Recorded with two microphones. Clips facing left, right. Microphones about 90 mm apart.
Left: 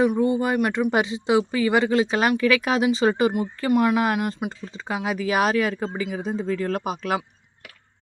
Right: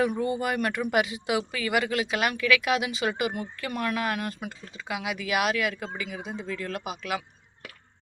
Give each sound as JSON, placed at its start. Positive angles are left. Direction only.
{"t": 0.2, "sound": "speech", "side_deg": 25}
{"t": 0.6, "sound": "speech", "side_deg": 15}
{"t": 0.9, "sound": "speech", "side_deg": 25}
{"t": 3.7, "sound": "speech", "side_deg": 20}